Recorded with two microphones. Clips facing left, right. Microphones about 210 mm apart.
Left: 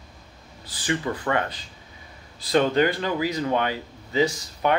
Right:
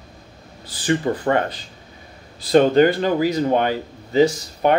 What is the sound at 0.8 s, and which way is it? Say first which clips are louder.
Speech: right 6 dB; 35° right (ahead or behind).